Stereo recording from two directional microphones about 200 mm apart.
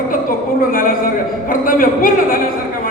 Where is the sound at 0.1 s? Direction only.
45° left (ahead or behind).